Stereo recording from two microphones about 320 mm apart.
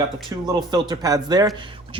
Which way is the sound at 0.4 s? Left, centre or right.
Centre.